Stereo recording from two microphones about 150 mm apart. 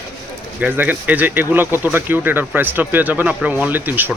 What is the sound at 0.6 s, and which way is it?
Speech, 10° right (ahead or behind).